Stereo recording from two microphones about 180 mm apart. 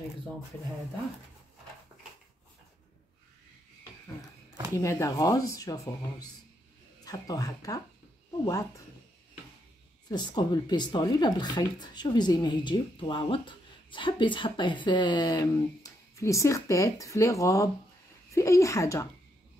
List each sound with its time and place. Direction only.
4.7 s speech: 15° left (ahead or behind)
10.0 s speech: 25° left (ahead or behind)